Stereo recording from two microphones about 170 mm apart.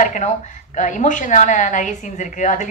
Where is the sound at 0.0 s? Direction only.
45° left (ahead or behind).